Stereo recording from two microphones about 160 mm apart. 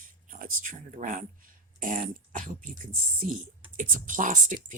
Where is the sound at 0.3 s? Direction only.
60° right (ahead or behind).